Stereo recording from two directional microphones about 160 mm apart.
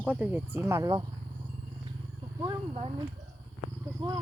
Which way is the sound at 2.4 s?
30° right (ahead or behind).